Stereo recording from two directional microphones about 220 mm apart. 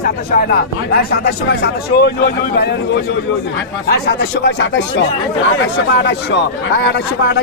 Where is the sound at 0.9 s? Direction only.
45° left (ahead or behind).